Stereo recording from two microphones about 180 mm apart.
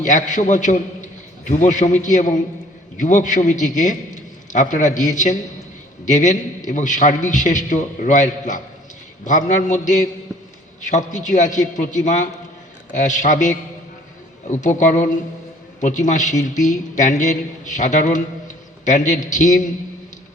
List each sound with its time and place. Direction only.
0.0 s a man's voice: 45° left (ahead or behind)